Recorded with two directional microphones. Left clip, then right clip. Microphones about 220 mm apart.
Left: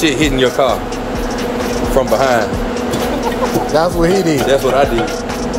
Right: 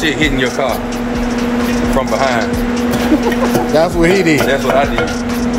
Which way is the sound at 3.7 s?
Centre (ahead or behind).